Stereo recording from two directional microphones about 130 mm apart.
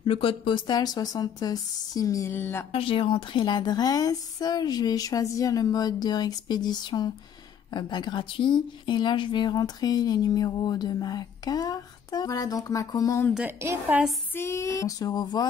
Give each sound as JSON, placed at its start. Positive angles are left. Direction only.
{"t": 0.0, "sound": "speech", "side_deg": 45}
{"t": 2.7, "sound": "speech", "side_deg": 45}
{"t": 13.3, "sound": "a woman's voice", "side_deg": -10}
{"t": 14.3, "sound": "speech", "side_deg": 20}